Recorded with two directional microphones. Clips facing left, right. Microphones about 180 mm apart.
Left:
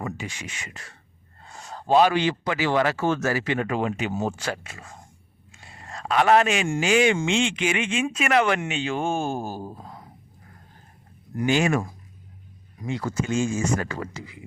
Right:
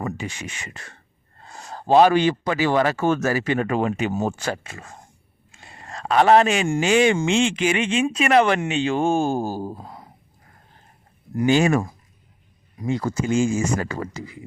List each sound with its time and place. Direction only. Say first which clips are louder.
0.0 s speech: right 4 dB; 50° right (ahead or behind)
1.7 s speech: right 4 dB; 45° right (ahead or behind)
11.4 s speech: right 4 dB; 35° right (ahead or behind)